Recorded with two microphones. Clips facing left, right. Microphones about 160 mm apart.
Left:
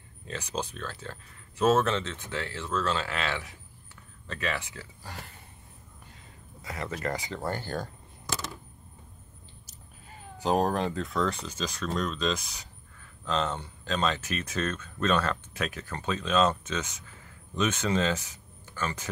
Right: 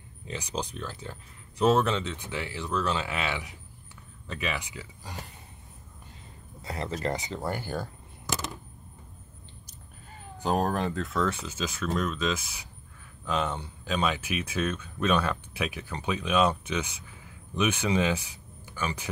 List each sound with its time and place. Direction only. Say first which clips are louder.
0.3 s speech: even; 15° right (ahead or behind)
6.6 s speech: right 2 dB; 30° right (ahead or behind); by 8.4 s 10° right (ahead or behind)
10.4 s speech: left 1 dB; centre (ahead or behind)